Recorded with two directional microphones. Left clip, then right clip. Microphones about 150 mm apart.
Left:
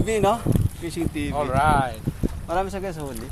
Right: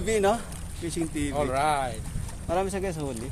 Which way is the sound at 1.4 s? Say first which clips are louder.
Left 6 dB; 10° right (ahead or behind).